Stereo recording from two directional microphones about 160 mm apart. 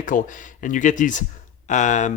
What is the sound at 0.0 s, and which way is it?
A man's voice, 55° left (ahead or behind).